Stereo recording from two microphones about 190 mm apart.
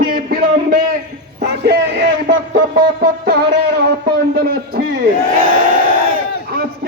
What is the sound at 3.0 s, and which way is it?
Music, 55° right (ahead or behind).